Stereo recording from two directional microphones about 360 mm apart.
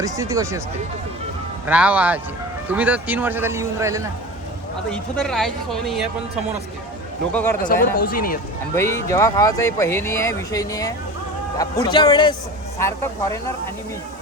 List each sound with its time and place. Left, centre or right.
0.0 s speech: centre
1.6 s a man's voice: centre
7.6 s speech: left
8.7 s speech: centre